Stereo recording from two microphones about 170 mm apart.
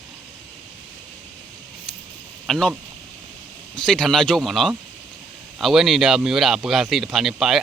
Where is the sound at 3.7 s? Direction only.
5° left (ahead or behind).